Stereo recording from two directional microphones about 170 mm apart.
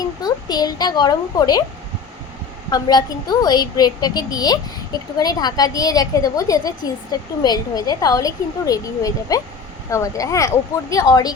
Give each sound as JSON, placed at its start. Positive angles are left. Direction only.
{"t": 0.0, "sound": "a child's voice", "side_deg": 20}
{"t": 2.6, "sound": "a child's voice", "side_deg": 25}